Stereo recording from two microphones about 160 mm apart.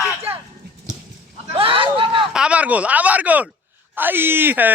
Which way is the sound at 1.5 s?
35° right (ahead or behind).